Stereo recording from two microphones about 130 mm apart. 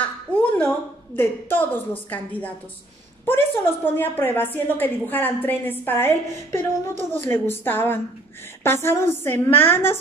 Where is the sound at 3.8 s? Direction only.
15° left (ahead or behind).